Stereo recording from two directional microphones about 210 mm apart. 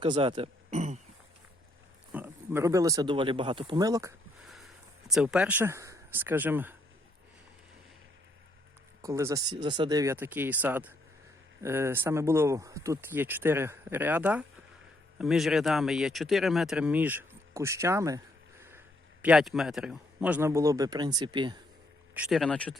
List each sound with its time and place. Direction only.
0.0 s speech: 25° right (ahead or behind)
2.1 s speech: 10° right (ahead or behind)
4.4 s speech: centre (ahead or behind)
9.0 s speech: 15° right (ahead or behind)
19.2 s speech: 5° right (ahead or behind); by 21.6 s 20° right (ahead or behind)
22.1 s speech: 5° right (ahead or behind)